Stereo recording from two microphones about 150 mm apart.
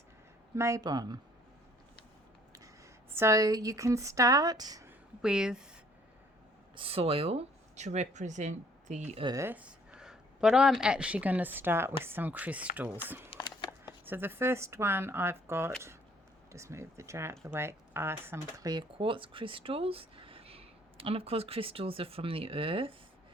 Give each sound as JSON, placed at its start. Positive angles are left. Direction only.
{"t": 0.5, "sound": "speech", "side_deg": -20}
{"t": 3.1, "sound": "speech", "side_deg": -20}
{"t": 4.9, "sound": "a sound", "side_deg": -5}
{"t": 6.7, "sound": "speech", "side_deg": -40}
{"t": 9.2, "sound": "speech", "side_deg": -20}
{"t": 13.3, "sound": "a sound", "side_deg": 30}
{"t": 13.8, "sound": "speech", "side_deg": -15}